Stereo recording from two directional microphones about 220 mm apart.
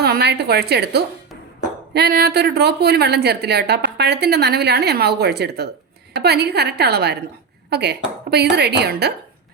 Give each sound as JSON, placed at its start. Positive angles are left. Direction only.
{"t": 0.0, "sound": "a woman's voice", "side_deg": -50}